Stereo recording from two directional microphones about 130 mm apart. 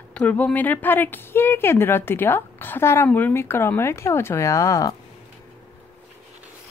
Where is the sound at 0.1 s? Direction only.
10° left (ahead or behind); by 4.9 s 25° left (ahead or behind).